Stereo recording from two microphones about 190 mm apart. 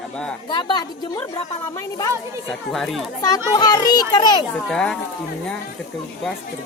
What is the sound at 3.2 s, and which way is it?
Speech, 20° left (ahead or behind).